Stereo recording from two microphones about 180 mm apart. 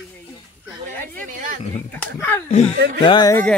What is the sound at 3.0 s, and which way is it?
Speech, 25° left (ahead or behind).